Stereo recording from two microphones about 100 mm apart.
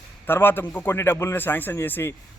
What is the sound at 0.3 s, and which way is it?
A man's voice, 20° left (ahead or behind).